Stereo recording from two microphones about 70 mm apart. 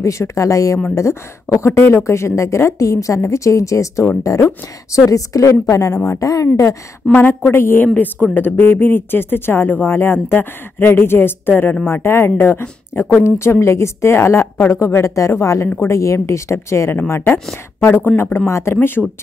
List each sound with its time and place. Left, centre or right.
0.0 s speech: left
7.2 s speech: left
7.8 s speech: left
17.1 s speech: left